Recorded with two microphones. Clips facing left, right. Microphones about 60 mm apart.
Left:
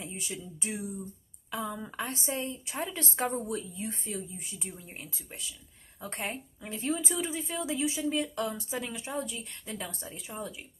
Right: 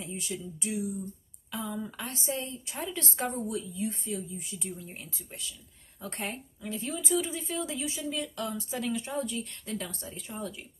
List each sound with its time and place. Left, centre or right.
0.0 s a sound: left
0.6 s speech: left
1.5 s a woman's voice: centre
3.4 s speech: left
4.6 s a woman's voice: centre; by 7.2 s left
7.2 s a woman's voice: centre